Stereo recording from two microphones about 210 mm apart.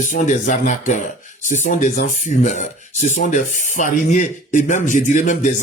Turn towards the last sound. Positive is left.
turn(degrees=35)  # may be behind; listen again after turning